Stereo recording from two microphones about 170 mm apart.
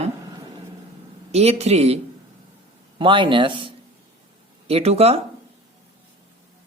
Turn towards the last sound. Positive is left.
turn(degrees=-35)  # may be behind; listen again after turning